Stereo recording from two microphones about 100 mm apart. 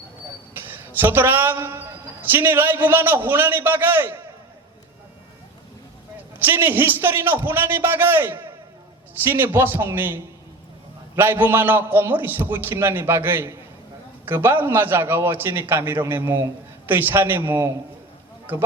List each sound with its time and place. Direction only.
0.5 s a man's voice: 20° right (ahead or behind)
6.4 s a man's voice: 20° right (ahead or behind)